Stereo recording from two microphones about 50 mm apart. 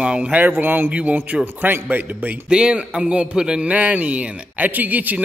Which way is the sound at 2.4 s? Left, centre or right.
Centre.